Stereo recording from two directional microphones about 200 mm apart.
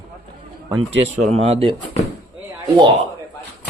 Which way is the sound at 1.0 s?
30° right (ahead or behind).